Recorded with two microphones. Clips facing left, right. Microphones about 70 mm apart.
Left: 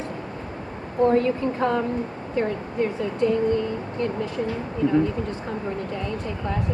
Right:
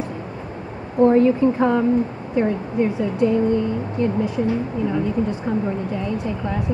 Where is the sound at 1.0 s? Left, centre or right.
Centre.